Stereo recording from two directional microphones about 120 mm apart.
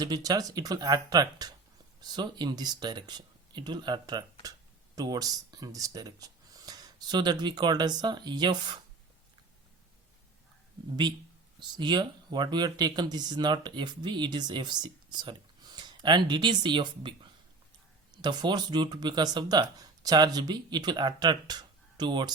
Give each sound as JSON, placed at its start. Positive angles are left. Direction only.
{"t": 0.0, "sound": "speech", "side_deg": -30}
{"t": 11.0, "sound": "speech", "side_deg": -35}